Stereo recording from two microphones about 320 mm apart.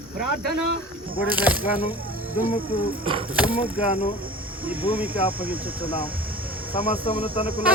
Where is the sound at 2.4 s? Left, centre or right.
Centre.